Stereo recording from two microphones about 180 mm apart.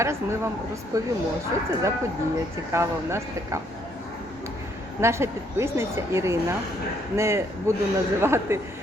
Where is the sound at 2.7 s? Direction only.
15° right (ahead or behind).